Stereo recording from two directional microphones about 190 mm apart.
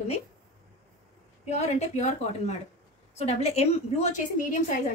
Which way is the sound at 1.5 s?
35° left (ahead or behind).